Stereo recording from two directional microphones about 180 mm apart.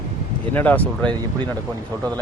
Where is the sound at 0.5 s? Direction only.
10° left (ahead or behind).